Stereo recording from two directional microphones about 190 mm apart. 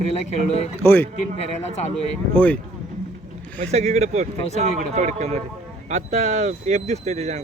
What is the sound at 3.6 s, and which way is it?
Speech, 35° right (ahead or behind).